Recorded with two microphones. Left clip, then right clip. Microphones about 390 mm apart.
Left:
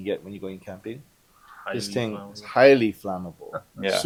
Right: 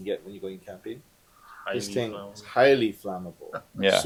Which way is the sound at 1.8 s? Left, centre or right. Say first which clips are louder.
Left 1 dB; left.